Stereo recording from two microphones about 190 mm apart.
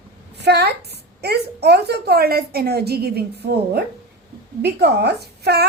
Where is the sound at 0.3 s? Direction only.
60° right (ahead or behind).